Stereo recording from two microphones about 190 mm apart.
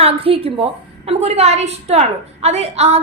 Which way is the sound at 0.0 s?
30° right (ahead or behind).